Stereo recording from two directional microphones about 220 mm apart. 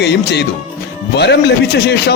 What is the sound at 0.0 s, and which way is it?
A man's voice, 50° left (ahead or behind).